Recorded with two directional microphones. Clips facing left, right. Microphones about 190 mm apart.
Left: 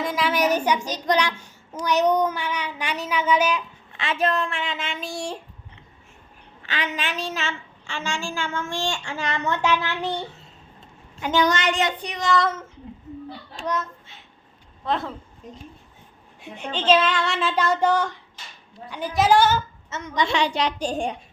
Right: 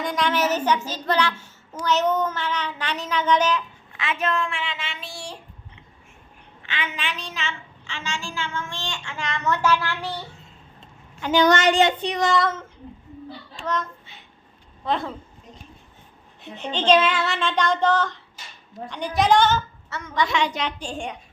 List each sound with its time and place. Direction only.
0.0 s a woman's voice: 5° left (ahead or behind)
0.3 s speech: 15° left (ahead or behind)
3.9 s child singing: 30° left (ahead or behind)
6.6 s a woman's voice: 40° left (ahead or behind)
9.6 s a child's voice: 20° left (ahead or behind)
11.6 s child singing: 30° right (ahead or behind)
12.4 s child singing: centre (ahead or behind)
13.6 s a child's voice: 5° left (ahead or behind)
14.8 s child singing: centre (ahead or behind)
16.4 s speech: 10° left (ahead or behind)
17.0 s child singing: 5° right (ahead or behind); by 18.2 s 10° left (ahead or behind)
18.9 s speech: 5° left (ahead or behind)
19.9 s a child's voice: 20° left (ahead or behind)
20.3 s child singing: 35° left (ahead or behind)